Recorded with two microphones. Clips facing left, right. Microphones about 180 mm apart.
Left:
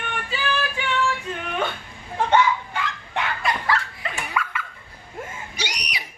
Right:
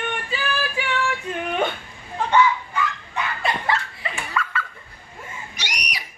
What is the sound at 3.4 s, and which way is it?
Belly laugh, 25° right (ahead or behind).